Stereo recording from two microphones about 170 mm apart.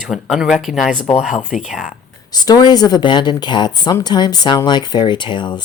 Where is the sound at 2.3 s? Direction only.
25° left (ahead or behind).